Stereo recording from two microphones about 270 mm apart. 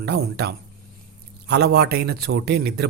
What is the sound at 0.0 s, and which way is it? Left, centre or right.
A man's voice, right.